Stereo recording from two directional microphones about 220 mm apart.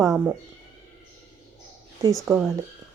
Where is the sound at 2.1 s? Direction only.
5° right (ahead or behind).